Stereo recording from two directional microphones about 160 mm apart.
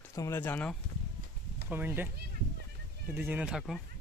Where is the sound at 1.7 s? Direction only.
10° right (ahead or behind).